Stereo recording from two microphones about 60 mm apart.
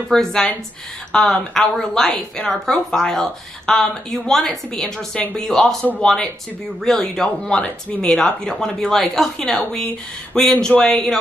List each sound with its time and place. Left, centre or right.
0.1 s speech: centre
9.6 s speech: centre